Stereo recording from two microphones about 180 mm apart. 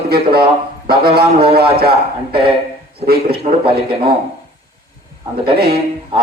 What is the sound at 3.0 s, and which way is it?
Speech, 60° right (ahead or behind).